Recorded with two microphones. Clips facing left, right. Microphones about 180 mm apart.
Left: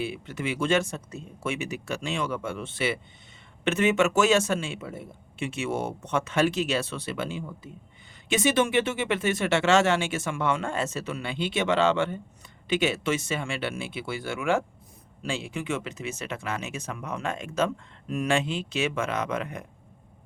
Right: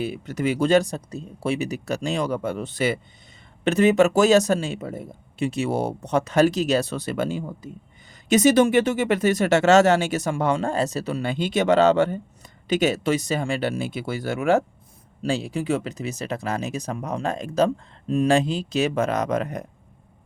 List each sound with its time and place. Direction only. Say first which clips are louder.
0.0 s a man's voice: right 6 dB; 40° right (ahead or behind)